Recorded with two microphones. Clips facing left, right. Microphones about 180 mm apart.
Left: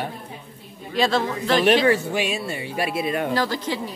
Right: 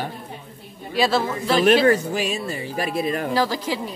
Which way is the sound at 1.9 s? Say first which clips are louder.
Right 1 dB; 40° right (ahead or behind).